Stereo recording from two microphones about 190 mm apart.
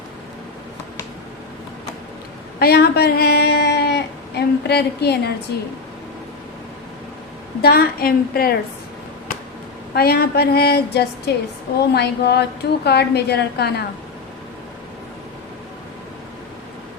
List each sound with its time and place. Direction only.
2.6 s a sound: 55° left (ahead or behind)
7.6 s a woman's voice: 55° left (ahead or behind)
9.9 s a woman's voice: 55° left (ahead or behind)